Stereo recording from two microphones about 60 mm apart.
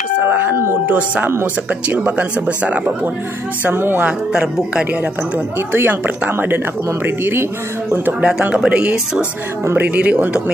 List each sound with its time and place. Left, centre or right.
0.2 s a sound: right
0.8 s speech: right
3.7 s a woman's voice: right
4.0 s speech: centre
5.7 s a woman's voice: right
8.5 s speech: centre